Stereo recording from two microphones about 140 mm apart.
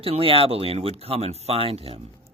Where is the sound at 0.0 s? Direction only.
40° right (ahead or behind).